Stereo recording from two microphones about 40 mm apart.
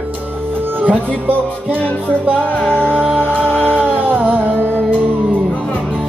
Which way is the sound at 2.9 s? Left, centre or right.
Right.